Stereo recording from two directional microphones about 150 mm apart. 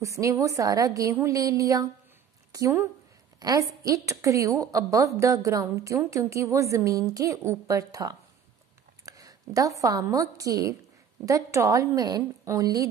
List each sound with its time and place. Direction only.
0.0 s a woman's voice: 20° right (ahead or behind)